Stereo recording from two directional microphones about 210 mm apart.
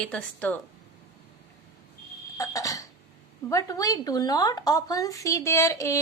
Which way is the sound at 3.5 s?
15° left (ahead or behind).